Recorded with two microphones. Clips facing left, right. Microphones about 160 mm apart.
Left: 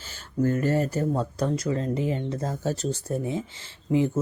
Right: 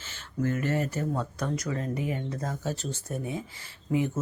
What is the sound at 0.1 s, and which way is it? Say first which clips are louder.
Speech: left 5 dB; 35° left (ahead or behind).